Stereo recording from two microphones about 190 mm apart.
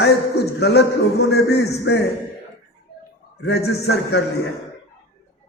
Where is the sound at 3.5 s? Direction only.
60° left (ahead or behind).